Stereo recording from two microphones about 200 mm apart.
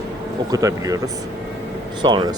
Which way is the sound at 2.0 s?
20° right (ahead or behind).